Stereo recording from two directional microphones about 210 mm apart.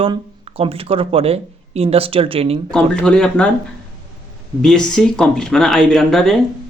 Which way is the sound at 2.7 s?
5° left (ahead or behind).